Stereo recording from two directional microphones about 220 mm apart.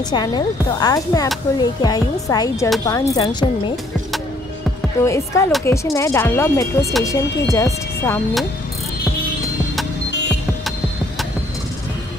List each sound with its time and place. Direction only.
0.1 s speech: 20° left (ahead or behind)
5.0 s speech: 15° left (ahead or behind)